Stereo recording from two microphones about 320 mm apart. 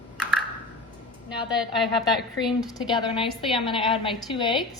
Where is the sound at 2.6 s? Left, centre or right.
Centre.